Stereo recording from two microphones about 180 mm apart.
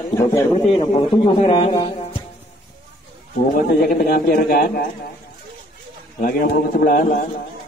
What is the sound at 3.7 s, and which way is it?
Speech, 55° left (ahead or behind).